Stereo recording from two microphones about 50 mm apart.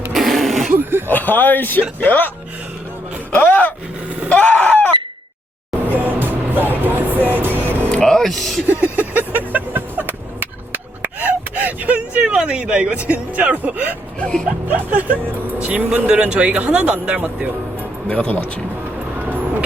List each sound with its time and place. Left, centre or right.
0.1 s a sound: centre
0.9 s a sound: right
1.1 s speech: left
3.3 s speech: left
4.3 s fowl: left
5.9 s music: right
7.9 s a sound: centre
8.2 s speech: centre
8.6 s a sound: right
12.2 s speech: centre; by 13.9 s right
14.2 s speech: centre
14.7 s speech: right
18.1 s speech: left